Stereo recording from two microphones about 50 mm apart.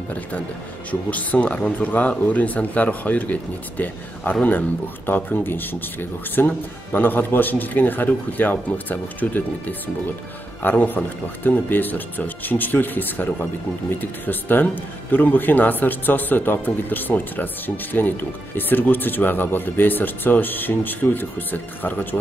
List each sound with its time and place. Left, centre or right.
1.1 s speech: left